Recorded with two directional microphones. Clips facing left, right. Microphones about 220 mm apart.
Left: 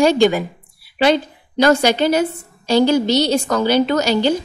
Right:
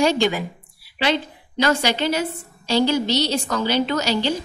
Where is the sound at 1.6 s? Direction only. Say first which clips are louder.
Left 6 dB; 50° left (ahead or behind).